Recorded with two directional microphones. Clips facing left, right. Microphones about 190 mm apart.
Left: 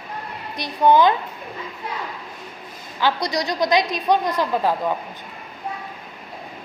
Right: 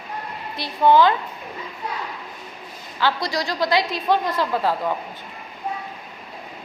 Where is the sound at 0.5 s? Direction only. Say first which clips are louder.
Even; 15° left (ahead or behind).